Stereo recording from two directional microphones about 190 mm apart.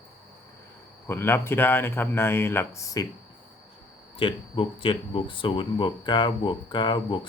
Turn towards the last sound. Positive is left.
turn(degrees=25)  # may be behind; listen again after turning